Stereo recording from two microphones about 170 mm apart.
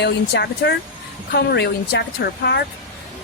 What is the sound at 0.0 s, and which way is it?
Speech, 85° left.